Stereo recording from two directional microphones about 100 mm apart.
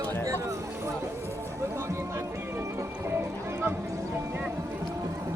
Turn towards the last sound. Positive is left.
turn(degrees=-20)  # may be behind; listen again after turning